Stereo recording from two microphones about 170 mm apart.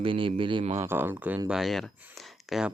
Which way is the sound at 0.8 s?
15° right (ahead or behind).